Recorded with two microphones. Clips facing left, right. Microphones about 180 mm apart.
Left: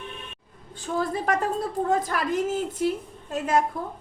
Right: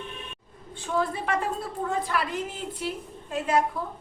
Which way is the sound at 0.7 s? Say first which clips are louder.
Left 1 dB; 40° left (ahead or behind).